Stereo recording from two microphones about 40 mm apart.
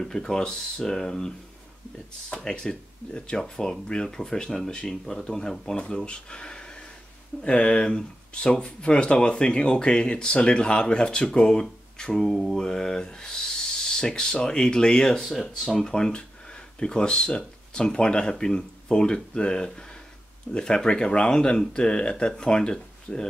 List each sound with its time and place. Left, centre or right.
0.0 s speech: centre